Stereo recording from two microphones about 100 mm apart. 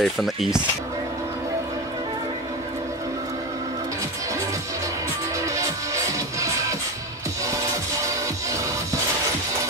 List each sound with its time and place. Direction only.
0.0 s speech: centre (ahead or behind)
7.4 s music: 30° right (ahead or behind)